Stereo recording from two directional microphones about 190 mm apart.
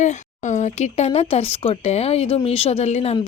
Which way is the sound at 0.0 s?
40° left (ahead or behind).